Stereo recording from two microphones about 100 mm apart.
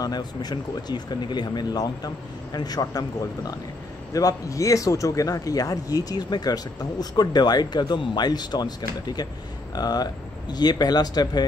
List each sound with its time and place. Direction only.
0.0 s a man's voice: 45° left (ahead or behind)